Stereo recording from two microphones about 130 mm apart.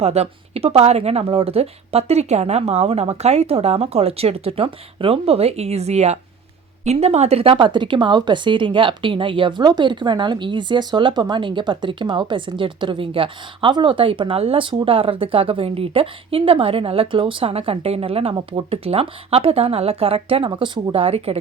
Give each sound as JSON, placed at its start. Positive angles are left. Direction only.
{"t": 0.0, "sound": "a woman's voice", "side_deg": -55}